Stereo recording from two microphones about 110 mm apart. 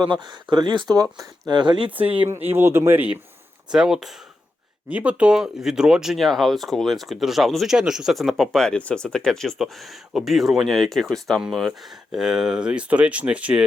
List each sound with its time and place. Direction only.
0.0 s speech: 45° right (ahead or behind)
2.2 s speech: 20° right (ahead or behind)